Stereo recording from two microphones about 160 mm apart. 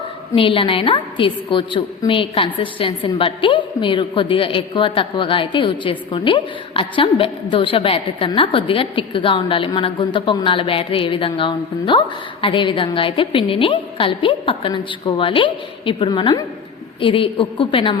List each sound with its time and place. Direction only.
0.3 s a woman's voice: 35° left (ahead or behind)